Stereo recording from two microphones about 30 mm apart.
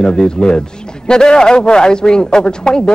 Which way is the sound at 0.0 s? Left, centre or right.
Left.